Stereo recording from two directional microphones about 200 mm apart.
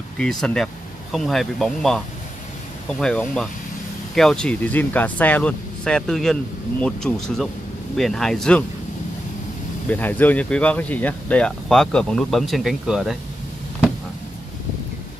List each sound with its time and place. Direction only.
0.2 s speech: centre (ahead or behind)
3.0 s speech: 5° left (ahead or behind)
9.8 s speech: 10° left (ahead or behind)